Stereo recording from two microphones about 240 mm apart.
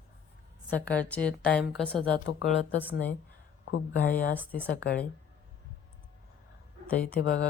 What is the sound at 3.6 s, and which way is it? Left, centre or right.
Speech, left.